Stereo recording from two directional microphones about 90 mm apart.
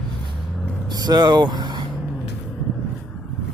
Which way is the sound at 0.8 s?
45° right (ahead or behind).